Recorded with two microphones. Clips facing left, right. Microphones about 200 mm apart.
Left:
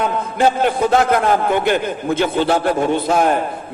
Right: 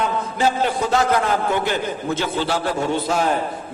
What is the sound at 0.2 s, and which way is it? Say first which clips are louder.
A man's voice: left 4 dB; 55° left (ahead or behind).